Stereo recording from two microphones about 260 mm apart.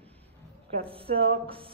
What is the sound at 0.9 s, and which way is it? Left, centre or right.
Speech, right.